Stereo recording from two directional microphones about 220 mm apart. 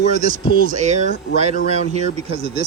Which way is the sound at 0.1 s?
35° right (ahead or behind).